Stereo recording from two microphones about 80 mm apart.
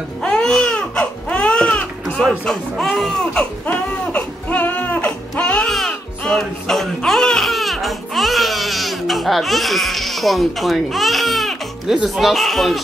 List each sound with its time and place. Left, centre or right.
0.2 s baby cry: centre
2.2 s speech: centre
3.6 s baby cry: centre
5.0 s baby cry: centre
5.7 s music: centre
12.0 s speech: centre